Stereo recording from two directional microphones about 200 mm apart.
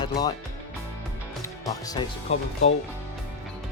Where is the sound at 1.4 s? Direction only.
20° left (ahead or behind).